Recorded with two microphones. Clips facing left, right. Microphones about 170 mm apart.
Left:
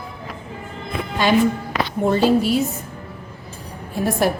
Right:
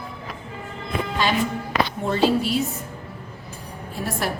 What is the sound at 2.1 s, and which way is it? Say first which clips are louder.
Speech: left 5 dB; 45° left (ahead or behind).